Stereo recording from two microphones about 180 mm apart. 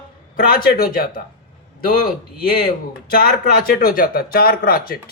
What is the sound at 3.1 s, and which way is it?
Speech, 55° left (ahead or behind).